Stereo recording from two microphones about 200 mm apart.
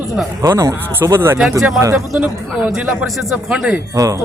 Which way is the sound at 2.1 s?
Centre (ahead or behind).